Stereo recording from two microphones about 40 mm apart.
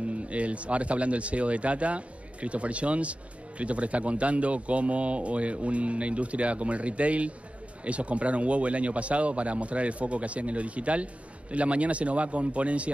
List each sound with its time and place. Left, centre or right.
0.3 s speech: right